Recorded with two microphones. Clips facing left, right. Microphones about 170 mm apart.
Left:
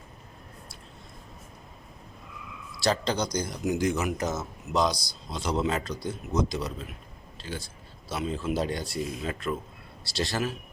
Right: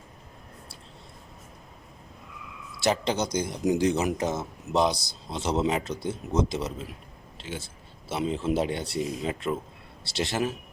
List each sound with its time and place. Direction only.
2.8 s speech: 20° right (ahead or behind)
8.1 s speech: 20° right (ahead or behind)